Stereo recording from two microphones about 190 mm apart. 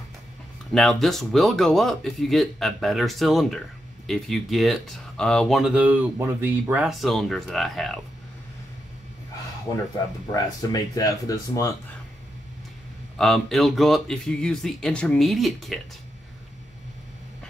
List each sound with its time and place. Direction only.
0.7 s speech: centre (ahead or behind)
10.3 s speech: 20° left (ahead or behind)
13.2 s speech: centre (ahead or behind)